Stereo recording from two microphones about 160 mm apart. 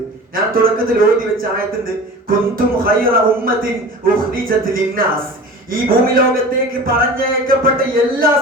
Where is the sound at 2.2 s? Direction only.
65° right (ahead or behind).